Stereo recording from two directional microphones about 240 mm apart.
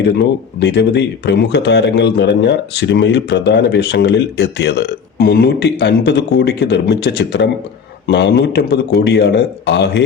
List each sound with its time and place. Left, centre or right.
0.0 s speech: left